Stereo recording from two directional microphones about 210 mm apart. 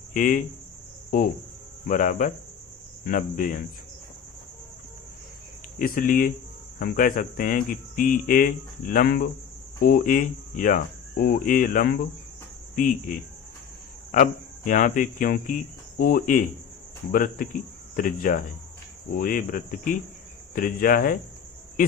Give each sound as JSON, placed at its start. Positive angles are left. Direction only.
{"t": 0.1, "sound": "speech", "side_deg": 40}
{"t": 1.9, "sound": "speech", "side_deg": 35}
{"t": 5.8, "sound": "speech", "side_deg": 40}